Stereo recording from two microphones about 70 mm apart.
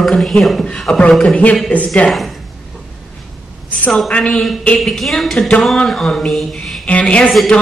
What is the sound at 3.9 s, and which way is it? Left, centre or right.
Speech, centre.